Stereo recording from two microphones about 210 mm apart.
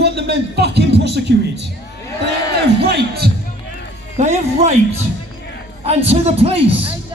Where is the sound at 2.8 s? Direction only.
50° right (ahead or behind).